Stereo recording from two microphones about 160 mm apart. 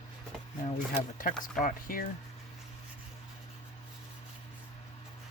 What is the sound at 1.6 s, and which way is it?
Speech, 60° left (ahead or behind).